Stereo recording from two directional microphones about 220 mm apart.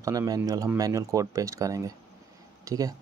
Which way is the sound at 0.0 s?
15° right (ahead or behind).